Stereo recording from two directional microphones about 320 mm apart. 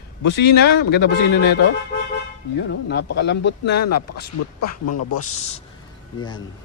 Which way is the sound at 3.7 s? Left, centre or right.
Left.